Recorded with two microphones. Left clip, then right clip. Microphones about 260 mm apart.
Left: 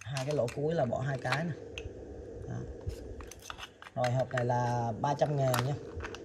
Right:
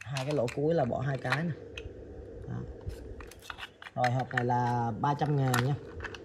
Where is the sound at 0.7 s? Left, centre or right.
Centre.